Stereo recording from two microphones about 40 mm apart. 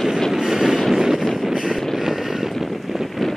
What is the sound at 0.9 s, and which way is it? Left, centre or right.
Wind noise, centre.